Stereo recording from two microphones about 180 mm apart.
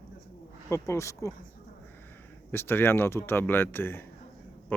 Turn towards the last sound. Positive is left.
turn(degrees=10)  # may be behind; listen again after turning